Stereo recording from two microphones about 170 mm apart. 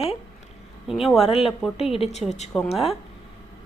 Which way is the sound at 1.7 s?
35° left (ahead or behind).